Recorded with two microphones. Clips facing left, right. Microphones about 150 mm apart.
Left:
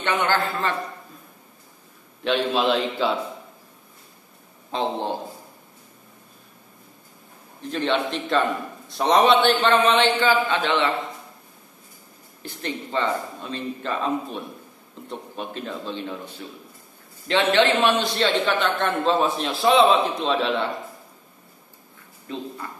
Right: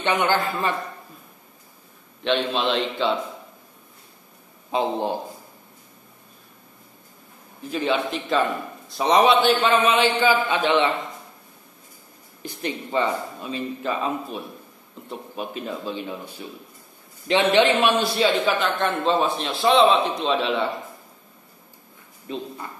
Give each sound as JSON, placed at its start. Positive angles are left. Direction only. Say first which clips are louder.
{"t": 0.0, "sound": "a man's voice", "louder": "right 1 dB", "side_deg": -15}
{"t": 2.2, "sound": "a man's voice", "louder": "left 1 dB", "side_deg": 5}
{"t": 4.6, "sound": "a man's voice", "louder": "right 2 dB", "side_deg": -10}
{"t": 7.7, "sound": "a man's voice", "louder": "even", "side_deg": -5}
{"t": 12.4, "sound": "a man's voice", "louder": "right 1 dB", "side_deg": -15}
{"t": 22.3, "sound": "speech", "louder": "right 1 dB", "side_deg": -20}